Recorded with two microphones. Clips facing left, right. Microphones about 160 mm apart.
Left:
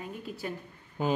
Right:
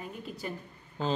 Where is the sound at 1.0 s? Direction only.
15° left (ahead or behind).